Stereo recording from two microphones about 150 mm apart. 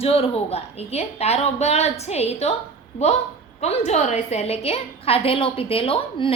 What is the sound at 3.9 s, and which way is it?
A woman's voice, 45° left (ahead or behind).